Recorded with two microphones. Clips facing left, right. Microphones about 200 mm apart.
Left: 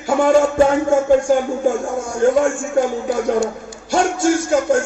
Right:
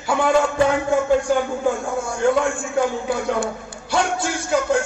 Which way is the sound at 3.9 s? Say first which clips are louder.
Left 6 dB; 45° left (ahead or behind).